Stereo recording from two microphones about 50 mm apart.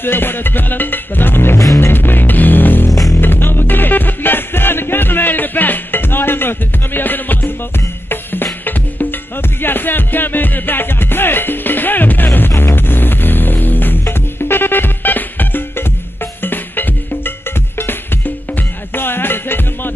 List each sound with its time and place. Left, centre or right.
0.0 s music: left
1.6 s music: left
1.9 s music: left
9.6 s music: left
18.9 s music: left